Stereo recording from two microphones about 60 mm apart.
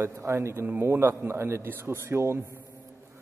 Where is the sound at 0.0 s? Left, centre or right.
Right.